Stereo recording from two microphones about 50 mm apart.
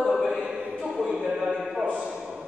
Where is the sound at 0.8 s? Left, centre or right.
Centre.